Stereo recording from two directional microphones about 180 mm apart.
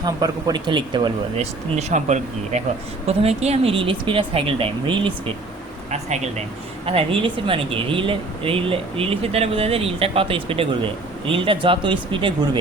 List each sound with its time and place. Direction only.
0.0 s speech: 20° right (ahead or behind)
1.9 s speech: 40° right (ahead or behind)